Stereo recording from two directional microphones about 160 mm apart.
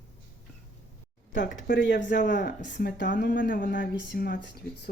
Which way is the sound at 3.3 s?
60° left (ahead or behind).